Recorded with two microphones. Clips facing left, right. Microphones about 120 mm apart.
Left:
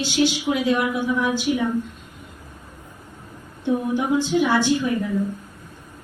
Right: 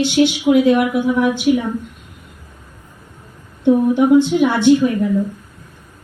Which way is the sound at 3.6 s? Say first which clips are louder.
Right 9 dB; 60° right (ahead or behind).